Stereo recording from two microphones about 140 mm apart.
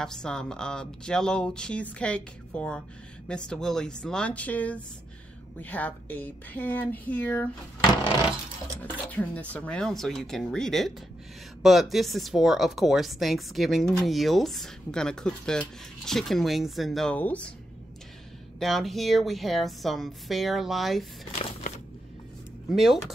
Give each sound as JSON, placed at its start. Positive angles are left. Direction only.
{"t": 0.0, "sound": "speech", "side_deg": 5}
{"t": 8.8, "sound": "speech", "side_deg": 10}
{"t": 18.6, "sound": "speech", "side_deg": 0}
{"t": 21.4, "sound": "a sound", "side_deg": 50}
{"t": 22.7, "sound": "speech", "side_deg": 0}